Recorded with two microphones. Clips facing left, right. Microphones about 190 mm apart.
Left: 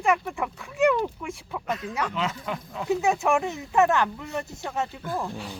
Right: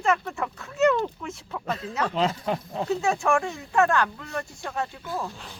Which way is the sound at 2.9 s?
15° left (ahead or behind).